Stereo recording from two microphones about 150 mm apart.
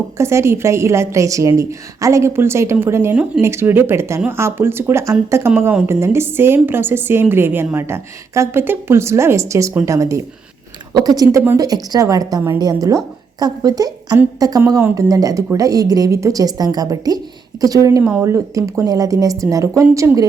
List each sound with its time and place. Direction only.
0.2 s a woman's voice: 20° right (ahead or behind)